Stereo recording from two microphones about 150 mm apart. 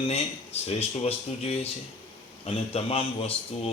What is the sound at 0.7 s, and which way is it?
Speech, 45° left (ahead or behind).